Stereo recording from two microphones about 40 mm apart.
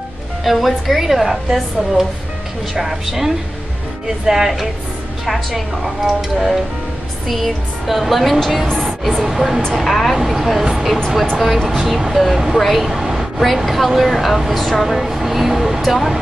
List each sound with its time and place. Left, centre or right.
0.4 s a woman's voice: centre
9.8 s a woman's voice: centre
12.5 s a sound: centre
13.5 s a woman's voice: centre